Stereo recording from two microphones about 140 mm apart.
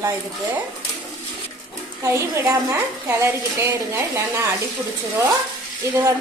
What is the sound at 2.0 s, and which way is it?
Speech, 20° right (ahead or behind).